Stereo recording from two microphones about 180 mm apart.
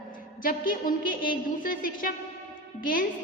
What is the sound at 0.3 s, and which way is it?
A woman's voice, 50° left (ahead or behind).